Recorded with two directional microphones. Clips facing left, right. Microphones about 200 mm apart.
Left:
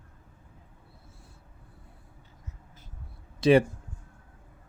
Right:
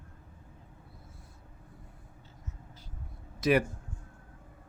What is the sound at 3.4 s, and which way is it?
Speech, 30° left (ahead or behind).